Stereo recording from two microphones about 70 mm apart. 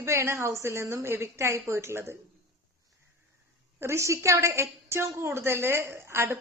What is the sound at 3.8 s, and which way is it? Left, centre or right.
A woman's voice, right.